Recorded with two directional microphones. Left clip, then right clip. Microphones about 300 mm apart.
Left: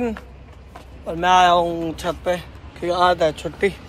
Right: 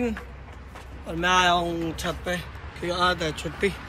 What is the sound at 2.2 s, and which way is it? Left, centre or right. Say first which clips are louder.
A man's voice: left 7 dB; centre.